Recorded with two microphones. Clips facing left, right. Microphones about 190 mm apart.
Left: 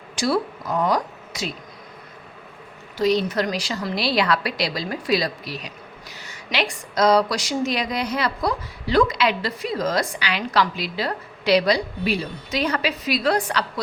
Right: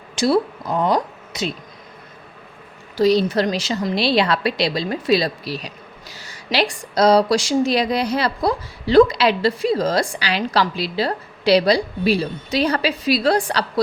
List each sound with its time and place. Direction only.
0.2 s speech: 25° right (ahead or behind)
3.0 s a woman's voice: 35° right (ahead or behind)